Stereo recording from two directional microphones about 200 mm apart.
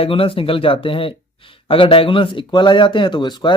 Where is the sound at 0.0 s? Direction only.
25° left (ahead or behind).